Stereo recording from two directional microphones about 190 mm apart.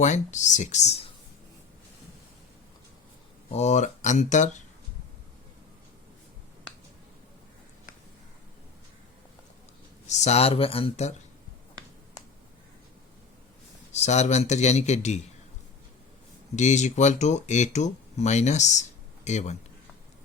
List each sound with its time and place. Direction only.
0.0 s speech: 40° left (ahead or behind)
3.5 s speech: 35° left (ahead or behind)
10.1 s speech: 35° left (ahead or behind)
13.9 s speech: 35° left (ahead or behind)
16.6 s speech: 40° left (ahead or behind)